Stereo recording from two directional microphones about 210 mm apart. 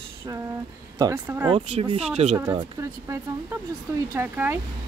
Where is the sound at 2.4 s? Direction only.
20° right (ahead or behind).